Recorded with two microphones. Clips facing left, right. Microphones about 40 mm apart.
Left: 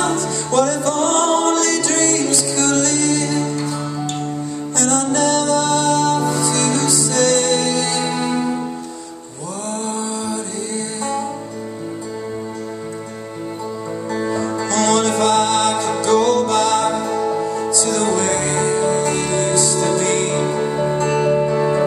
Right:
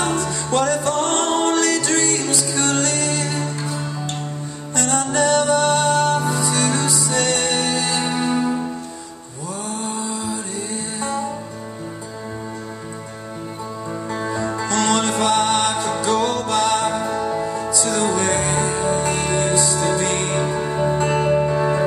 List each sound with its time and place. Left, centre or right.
0.0 s music: right
9.7 s mantra: right
14.1 s music: centre
20.4 s music: centre
21.0 s music: centre
21.5 s music: centre